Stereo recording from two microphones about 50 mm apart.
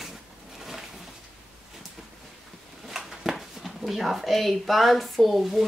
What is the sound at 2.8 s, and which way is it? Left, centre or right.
Speech, centre.